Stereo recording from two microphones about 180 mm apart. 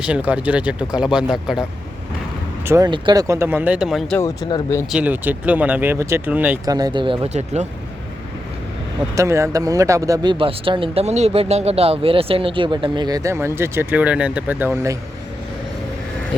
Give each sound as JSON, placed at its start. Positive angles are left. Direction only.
{"t": 0.0, "sound": "speech", "side_deg": -5}
{"t": 2.6, "sound": "speech", "side_deg": -20}
{"t": 4.2, "sound": "speech", "side_deg": 20}
{"t": 4.9, "sound": "speech", "side_deg": -5}
{"t": 6.7, "sound": "speech", "side_deg": -20}
{"t": 9.1, "sound": "speech", "side_deg": -15}
{"t": 10.3, "sound": "speech", "side_deg": -30}